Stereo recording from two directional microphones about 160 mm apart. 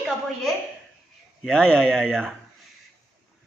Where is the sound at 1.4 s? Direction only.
5° left (ahead or behind).